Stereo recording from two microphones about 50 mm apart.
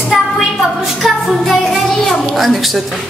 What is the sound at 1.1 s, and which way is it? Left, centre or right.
A child's voice, centre.